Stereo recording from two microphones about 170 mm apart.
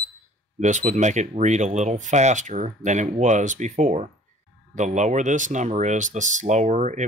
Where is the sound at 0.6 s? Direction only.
45° right (ahead or behind).